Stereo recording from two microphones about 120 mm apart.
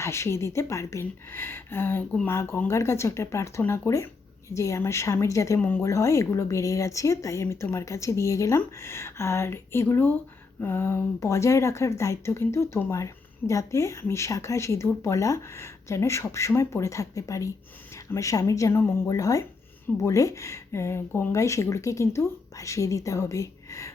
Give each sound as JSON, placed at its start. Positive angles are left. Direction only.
{"t": 0.0, "sound": "speech", "side_deg": 25}
{"t": 5.5, "sound": "speech", "side_deg": 15}
{"t": 5.8, "sound": "speech", "side_deg": 25}